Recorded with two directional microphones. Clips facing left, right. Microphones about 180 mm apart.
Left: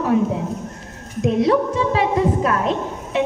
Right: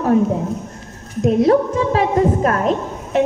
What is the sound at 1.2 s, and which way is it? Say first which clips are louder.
A woman's voice: right 3 dB; 45° right (ahead or behind).